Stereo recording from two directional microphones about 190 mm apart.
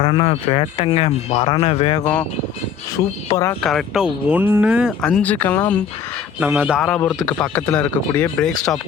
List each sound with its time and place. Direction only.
0.0 s speech: 30° left (ahead or behind)
2.0 s speech: 10° left (ahead or behind)
3.6 s speech: centre (ahead or behind)
6.4 s a man's voice: 10° right (ahead or behind)
6.8 s speech: 5° left (ahead or behind)